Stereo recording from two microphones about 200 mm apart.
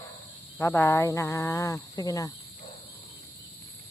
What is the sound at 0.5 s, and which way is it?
Speech, 10° left (ahead or behind).